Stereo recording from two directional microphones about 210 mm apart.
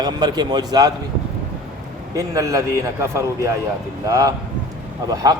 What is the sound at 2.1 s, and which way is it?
Speech, 15° right (ahead or behind).